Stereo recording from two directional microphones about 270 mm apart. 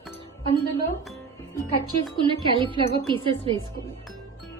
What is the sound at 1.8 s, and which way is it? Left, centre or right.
Speech, centre.